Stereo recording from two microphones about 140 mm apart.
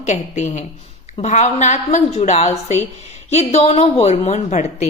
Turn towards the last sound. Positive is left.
turn(degrees=55)  # may be behind; listen again after turning